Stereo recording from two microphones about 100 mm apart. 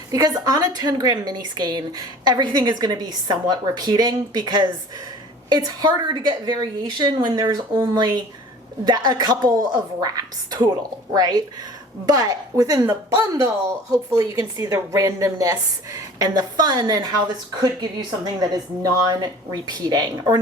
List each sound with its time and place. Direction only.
0.1 s a woman's voice: 40° right (ahead or behind)
18.3 s a woman's voice: 40° right (ahead or behind)